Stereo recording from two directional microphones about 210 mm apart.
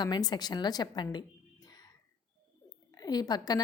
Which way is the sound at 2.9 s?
20° left (ahead or behind).